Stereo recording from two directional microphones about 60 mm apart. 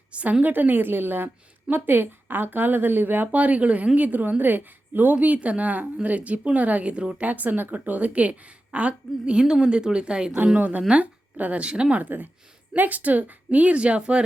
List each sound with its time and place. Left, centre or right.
0.1 s a woman's voice: right
10.3 s speech: right